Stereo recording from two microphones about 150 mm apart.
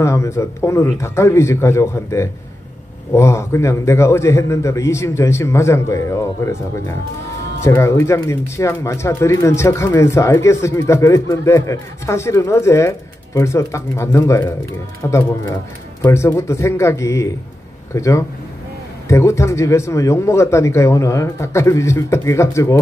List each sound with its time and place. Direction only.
0.0 s speech: 20° left (ahead or behind)